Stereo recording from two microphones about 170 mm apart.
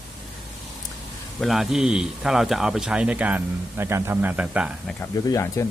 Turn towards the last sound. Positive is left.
turn(degrees=20)  # may be behind; listen again after turning